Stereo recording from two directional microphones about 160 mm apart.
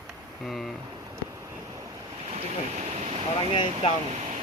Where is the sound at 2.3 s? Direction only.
45° right (ahead or behind).